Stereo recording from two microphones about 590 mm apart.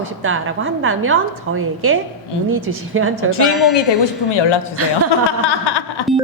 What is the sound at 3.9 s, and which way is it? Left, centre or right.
Speech, left.